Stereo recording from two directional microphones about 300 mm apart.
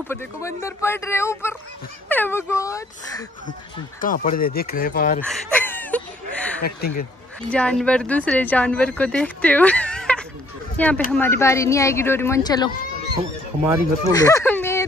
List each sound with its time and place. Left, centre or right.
0.1 s speech: centre
4.0 s speech: left
5.2 s a sound: centre
6.8 s speech: left
7.4 s a woman's voice: centre
14.1 s a sound: centre